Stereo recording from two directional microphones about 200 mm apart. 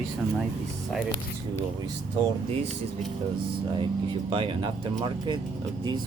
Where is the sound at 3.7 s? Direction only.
25° right (ahead or behind).